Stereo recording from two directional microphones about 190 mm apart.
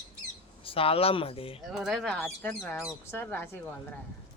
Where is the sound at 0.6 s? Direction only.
30° left (ahead or behind).